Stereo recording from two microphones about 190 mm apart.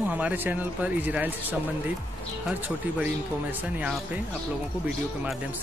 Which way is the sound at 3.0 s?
5° right (ahead or behind).